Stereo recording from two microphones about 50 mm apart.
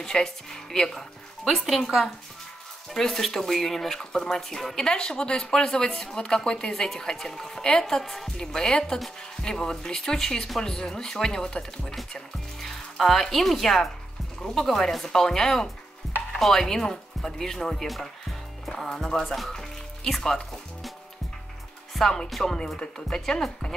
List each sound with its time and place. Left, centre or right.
0.0 s a woman's voice: centre
21.9 s speech: centre